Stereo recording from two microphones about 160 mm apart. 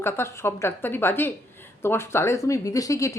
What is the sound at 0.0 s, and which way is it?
A woman's voice, 15° left (ahead or behind).